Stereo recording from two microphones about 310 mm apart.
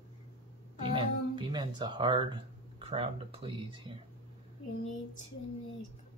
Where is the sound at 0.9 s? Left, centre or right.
Centre.